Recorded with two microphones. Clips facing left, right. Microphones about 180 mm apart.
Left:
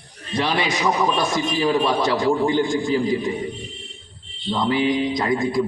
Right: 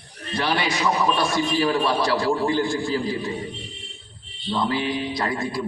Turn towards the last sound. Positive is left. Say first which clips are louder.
# left 5 dB
turn(degrees=15)  # may be behind; listen again after turning